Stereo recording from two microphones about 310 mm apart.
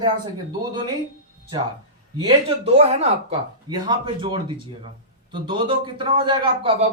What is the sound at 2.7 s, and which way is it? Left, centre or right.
Speech, centre.